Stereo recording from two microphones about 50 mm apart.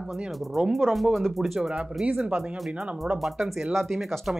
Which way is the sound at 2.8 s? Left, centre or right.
Right.